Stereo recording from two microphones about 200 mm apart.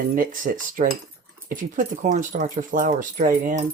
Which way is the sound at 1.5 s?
40° right (ahead or behind).